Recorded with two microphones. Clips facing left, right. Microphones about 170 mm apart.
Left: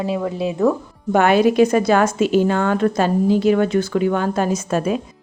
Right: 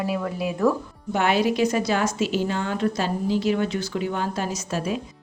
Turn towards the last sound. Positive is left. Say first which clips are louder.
# left 7 dB
turn(degrees=55)  # may be behind; listen again after turning